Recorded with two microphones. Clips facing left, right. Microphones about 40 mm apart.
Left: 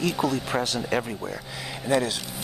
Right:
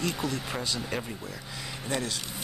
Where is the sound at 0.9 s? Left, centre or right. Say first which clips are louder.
Left 10 dB; left.